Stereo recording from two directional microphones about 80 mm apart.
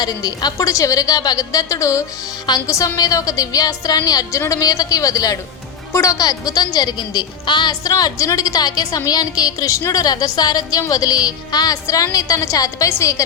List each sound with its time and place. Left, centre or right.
0.0 s a woman's voice: left
4.3 s a woman's voice: left